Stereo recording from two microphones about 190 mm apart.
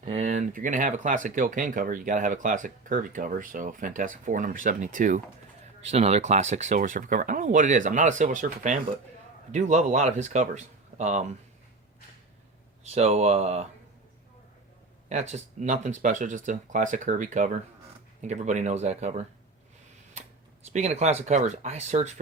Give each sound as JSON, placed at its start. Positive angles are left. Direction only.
{"t": 0.0, "sound": "speech", "side_deg": -40}
{"t": 12.9, "sound": "speech", "side_deg": -35}
{"t": 15.1, "sound": "speech", "side_deg": -35}
{"t": 20.7, "sound": "speech", "side_deg": -35}